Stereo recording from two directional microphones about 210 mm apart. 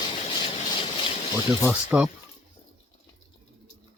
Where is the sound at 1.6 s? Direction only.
5° right (ahead or behind).